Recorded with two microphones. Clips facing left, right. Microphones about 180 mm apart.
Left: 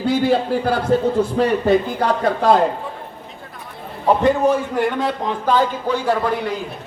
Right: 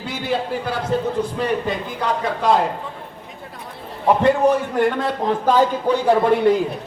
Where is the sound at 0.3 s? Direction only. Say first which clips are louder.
Left 5 dB; 50° left (ahead or behind).